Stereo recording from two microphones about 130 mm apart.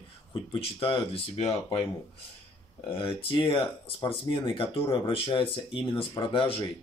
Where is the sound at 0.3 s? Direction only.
40° left (ahead or behind).